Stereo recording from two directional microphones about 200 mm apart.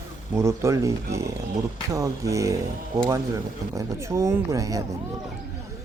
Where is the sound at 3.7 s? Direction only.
15° right (ahead or behind).